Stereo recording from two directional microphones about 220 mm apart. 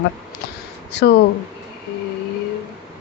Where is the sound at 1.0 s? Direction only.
50° left (ahead or behind).